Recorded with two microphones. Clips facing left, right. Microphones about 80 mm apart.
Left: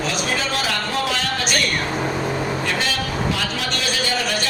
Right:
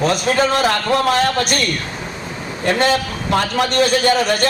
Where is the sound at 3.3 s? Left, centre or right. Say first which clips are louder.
Right 7 dB; right.